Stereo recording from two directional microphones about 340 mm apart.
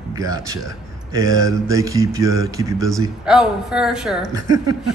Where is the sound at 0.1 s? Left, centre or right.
Centre.